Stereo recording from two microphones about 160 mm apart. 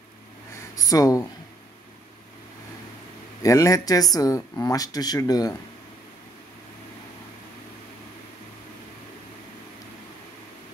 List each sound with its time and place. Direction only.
0.7 s speech: 20° left (ahead or behind)
3.4 s speech: 20° left (ahead or behind)